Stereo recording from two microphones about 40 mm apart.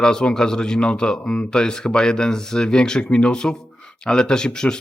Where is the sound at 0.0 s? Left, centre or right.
Centre.